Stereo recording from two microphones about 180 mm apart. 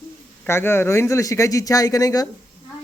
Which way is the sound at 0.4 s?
15° left (ahead or behind).